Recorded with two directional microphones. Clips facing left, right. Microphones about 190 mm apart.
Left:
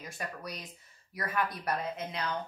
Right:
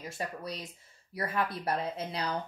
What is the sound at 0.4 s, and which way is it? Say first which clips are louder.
A woman's voice: right 3 dB; 25° right (ahead or behind).